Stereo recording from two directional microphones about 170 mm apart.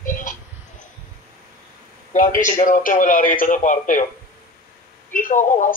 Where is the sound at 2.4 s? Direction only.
50° left (ahead or behind).